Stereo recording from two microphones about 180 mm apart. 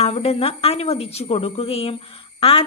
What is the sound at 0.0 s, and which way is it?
A woman's voice, 35° left (ahead or behind).